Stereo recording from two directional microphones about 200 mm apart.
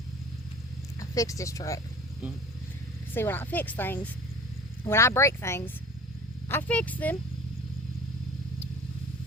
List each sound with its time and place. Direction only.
0.9 s speech: 15° left (ahead or behind)
3.2 s a woman's voice: 10° left (ahead or behind)